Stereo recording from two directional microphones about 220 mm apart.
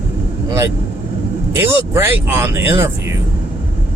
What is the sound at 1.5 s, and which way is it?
Speech, 10° right (ahead or behind).